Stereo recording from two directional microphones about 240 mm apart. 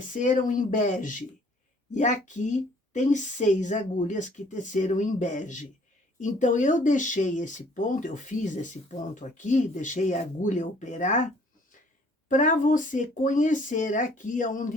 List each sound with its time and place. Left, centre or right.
0.0 s speech: left
12.3 s speech: left